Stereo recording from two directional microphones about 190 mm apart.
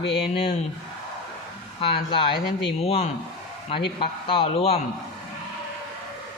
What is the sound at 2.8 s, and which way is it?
Speech, 30° left (ahead or behind).